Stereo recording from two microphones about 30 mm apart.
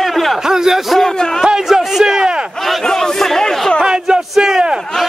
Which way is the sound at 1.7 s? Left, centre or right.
Centre.